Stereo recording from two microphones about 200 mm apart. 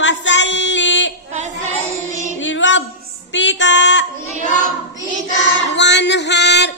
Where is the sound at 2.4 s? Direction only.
65° left (ahead or behind).